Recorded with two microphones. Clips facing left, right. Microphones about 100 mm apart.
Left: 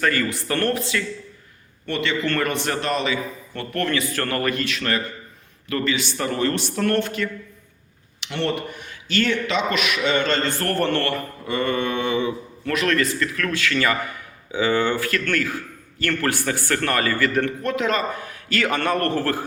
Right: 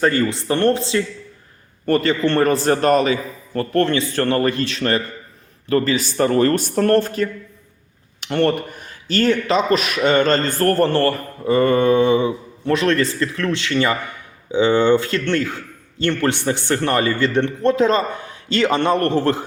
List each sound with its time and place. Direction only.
0.0 s a man's voice: 25° right (ahead or behind)
1.9 s speech: 40° right (ahead or behind)
8.2 s a man's voice: 50° right (ahead or behind); by 19.5 s 20° right (ahead or behind)